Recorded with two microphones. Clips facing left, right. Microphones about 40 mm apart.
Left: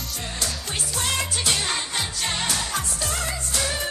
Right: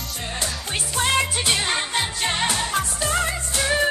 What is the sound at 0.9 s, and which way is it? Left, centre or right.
Music, right.